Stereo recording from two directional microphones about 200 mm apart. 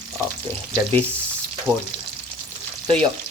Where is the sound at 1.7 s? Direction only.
15° right (ahead or behind).